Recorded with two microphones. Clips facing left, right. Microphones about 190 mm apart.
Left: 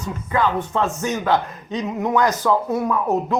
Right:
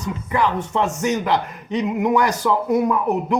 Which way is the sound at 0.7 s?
15° right (ahead or behind).